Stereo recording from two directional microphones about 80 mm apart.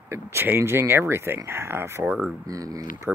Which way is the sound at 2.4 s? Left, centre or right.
Right.